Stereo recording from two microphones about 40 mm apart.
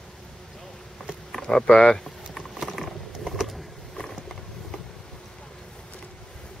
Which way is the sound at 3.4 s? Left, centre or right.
Centre.